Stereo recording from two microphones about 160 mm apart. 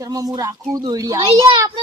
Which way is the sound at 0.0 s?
25° right (ahead or behind).